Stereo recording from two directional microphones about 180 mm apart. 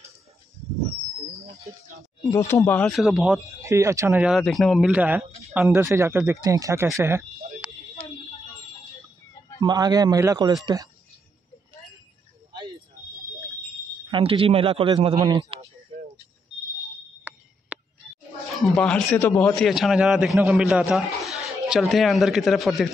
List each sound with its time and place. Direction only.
2.3 s speech: 15° left (ahead or behind)
3.0 s a man's voice: centre (ahead or behind)
3.6 s speech: 15° right (ahead or behind)
4.3 s a man's voice: centre (ahead or behind); by 7.2 s 15° right (ahead or behind)
9.6 s speech: 20° right (ahead or behind)
14.1 s a man's voice: 30° right (ahead or behind)
18.0 s roaring cats: 5° left (ahead or behind)
18.6 s a man's voice: centre (ahead or behind)